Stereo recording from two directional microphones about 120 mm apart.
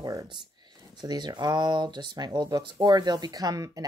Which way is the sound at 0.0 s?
30° right (ahead or behind).